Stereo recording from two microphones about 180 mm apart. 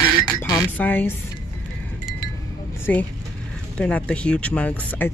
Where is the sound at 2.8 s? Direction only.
10° left (ahead or behind).